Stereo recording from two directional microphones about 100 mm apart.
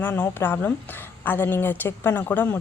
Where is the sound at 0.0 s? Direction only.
20° left (ahead or behind).